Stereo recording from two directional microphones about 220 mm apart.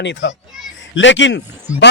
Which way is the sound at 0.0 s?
55° left (ahead or behind).